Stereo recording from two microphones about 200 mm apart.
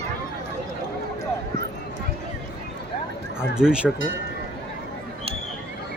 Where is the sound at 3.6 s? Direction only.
5° right (ahead or behind).